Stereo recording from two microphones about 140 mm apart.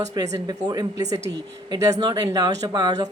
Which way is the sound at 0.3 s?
30° right (ahead or behind).